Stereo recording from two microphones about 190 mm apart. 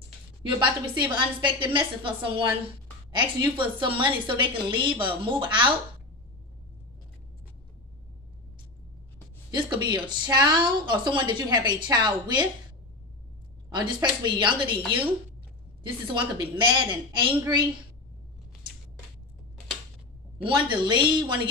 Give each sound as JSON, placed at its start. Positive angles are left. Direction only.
{"t": 0.5, "sound": "a woman's voice", "side_deg": -25}
{"t": 9.5, "sound": "a woman's voice", "side_deg": -25}
{"t": 13.7, "sound": "a woman's voice", "side_deg": -25}
{"t": 16.1, "sound": "a woman's voice", "side_deg": -25}
{"t": 20.4, "sound": "a woman's voice", "side_deg": -25}